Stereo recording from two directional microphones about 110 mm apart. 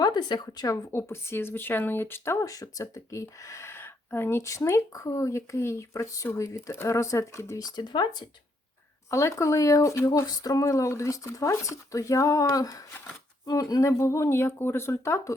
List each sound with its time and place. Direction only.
0.0 s speech: 40° left (ahead or behind)
9.0 s speech: 25° left (ahead or behind)